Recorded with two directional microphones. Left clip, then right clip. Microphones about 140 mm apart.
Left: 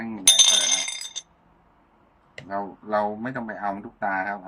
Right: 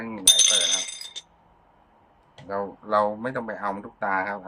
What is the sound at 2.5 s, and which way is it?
A man's voice, 30° right (ahead or behind).